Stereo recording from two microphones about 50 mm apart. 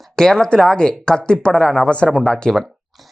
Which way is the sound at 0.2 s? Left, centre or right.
Centre.